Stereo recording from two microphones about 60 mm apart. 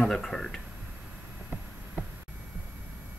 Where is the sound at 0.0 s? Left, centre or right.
Centre.